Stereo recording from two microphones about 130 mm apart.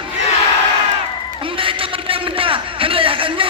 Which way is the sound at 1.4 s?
45° right (ahead or behind).